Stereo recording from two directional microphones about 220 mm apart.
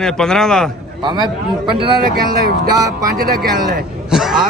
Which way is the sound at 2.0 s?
45° right (ahead or behind).